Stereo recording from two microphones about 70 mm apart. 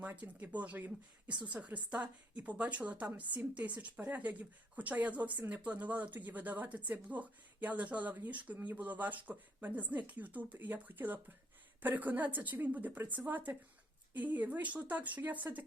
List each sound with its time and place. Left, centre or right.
0.0 s a woman's voice: right